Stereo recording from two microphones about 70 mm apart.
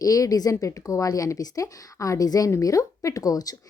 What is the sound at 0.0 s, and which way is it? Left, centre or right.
Speech, left.